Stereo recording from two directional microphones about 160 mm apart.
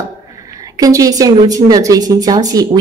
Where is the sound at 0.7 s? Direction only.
20° right (ahead or behind).